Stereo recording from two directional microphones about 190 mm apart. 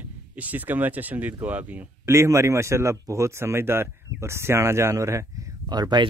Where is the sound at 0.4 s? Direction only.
10° right (ahead or behind).